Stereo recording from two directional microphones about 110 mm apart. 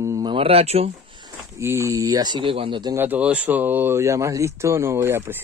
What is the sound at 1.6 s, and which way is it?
Speech, 25° right (ahead or behind).